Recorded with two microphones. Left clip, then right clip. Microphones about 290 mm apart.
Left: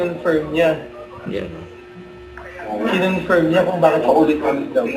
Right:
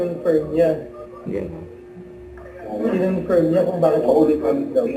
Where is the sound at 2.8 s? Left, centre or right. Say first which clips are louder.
Left 2 dB; centre.